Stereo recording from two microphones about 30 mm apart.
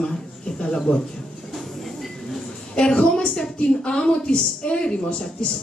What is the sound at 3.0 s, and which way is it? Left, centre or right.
A woman's voice, left.